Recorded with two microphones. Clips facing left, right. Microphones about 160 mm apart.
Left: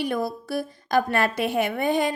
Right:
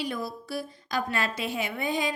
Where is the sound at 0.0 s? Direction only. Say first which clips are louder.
Left 6 dB; 55° left (ahead or behind).